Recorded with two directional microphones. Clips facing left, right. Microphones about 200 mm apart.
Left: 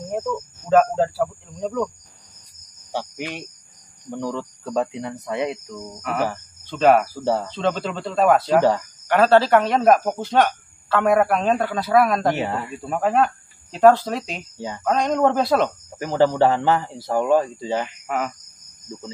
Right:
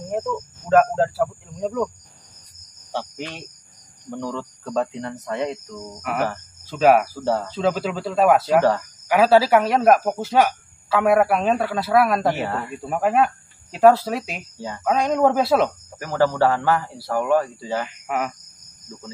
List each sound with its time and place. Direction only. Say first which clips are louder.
0.1 s speech: even; centre (ahead or behind)
2.9 s speech: left 1 dB; 10° left (ahead or behind)
6.6 s speech: even; 5° right (ahead or behind)
7.2 s speech: left 1 dB; 15° left (ahead or behind)
7.4 s speech: right 1 dB; 5° right (ahead or behind)
12.4 s speech: left 1 dB; 15° left (ahead or behind)
12.7 s speech: right 1 dB; 5° right (ahead or behind)
16.0 s a man's voice: left 2 dB; 20° left (ahead or behind)
18.0 s speech: even; 5° right (ahead or behind)